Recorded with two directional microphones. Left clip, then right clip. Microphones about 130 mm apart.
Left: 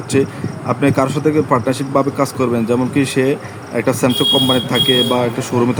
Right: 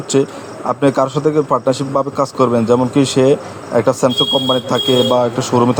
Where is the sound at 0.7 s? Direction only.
15° right (ahead or behind).